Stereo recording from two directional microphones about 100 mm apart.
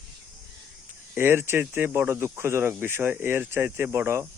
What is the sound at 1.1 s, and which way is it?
Speech, 20° right (ahead or behind).